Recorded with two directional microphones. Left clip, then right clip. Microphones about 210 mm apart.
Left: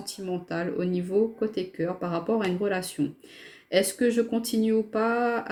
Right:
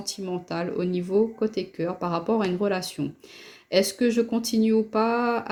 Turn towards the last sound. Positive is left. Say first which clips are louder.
# right 2 dB
turn(degrees=-40)  # may be behind; listen again after turning